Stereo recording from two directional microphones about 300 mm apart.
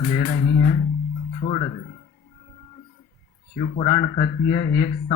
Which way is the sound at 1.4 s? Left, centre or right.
Centre.